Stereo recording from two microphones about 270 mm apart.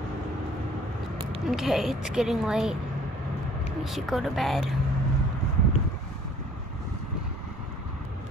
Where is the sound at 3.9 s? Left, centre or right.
Centre.